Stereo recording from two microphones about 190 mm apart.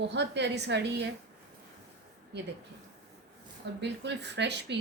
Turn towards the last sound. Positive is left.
turn(degrees=-65)  # may be behind; listen again after turning